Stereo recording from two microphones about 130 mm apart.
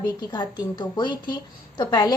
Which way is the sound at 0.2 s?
30° left (ahead or behind).